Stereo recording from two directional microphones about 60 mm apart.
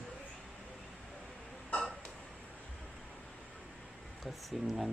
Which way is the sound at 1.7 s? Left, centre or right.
Centre.